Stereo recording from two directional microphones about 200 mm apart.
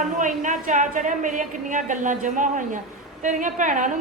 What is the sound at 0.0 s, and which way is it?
Speech, 40° right (ahead or behind).